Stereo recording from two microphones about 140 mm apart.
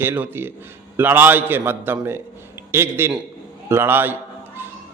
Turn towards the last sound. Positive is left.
turn(degrees=-15)  # may be behind; listen again after turning